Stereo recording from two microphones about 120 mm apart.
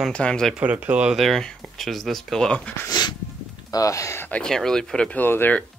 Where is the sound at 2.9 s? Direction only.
35° left (ahead or behind).